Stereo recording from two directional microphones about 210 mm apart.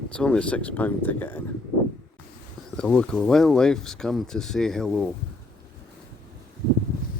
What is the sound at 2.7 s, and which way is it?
Speech, 5° left (ahead or behind).